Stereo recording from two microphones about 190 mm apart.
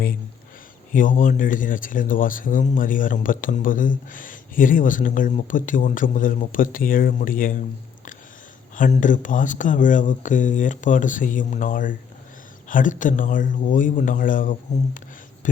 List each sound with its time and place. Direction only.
0.9 s speech: 45° left (ahead or behind)
8.7 s speech: 45° left (ahead or behind)